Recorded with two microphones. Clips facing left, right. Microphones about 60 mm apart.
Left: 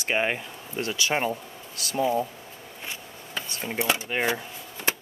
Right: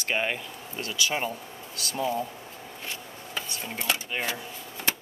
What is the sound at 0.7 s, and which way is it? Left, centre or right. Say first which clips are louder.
Speech: left 3 dB; left.